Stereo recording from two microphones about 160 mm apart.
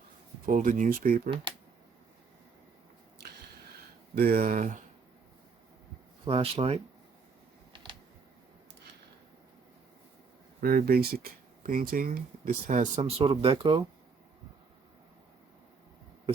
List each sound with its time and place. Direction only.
0.4 s speech: 55° right (ahead or behind)
4.1 s speech: 65° right (ahead or behind)
6.2 s speech: 35° right (ahead or behind)
7.7 s a sound: 30° right (ahead or behind)
10.6 s speech: 70° right (ahead or behind); by 13.8 s 35° right (ahead or behind)